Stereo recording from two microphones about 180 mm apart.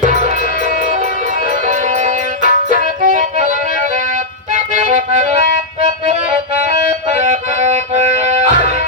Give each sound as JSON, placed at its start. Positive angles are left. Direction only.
{"t": 0.0, "sound": "music", "side_deg": -45}
{"t": 1.6, "sound": "music", "side_deg": -45}
{"t": 4.5, "sound": "music", "side_deg": -45}
{"t": 7.1, "sound": "music", "side_deg": -40}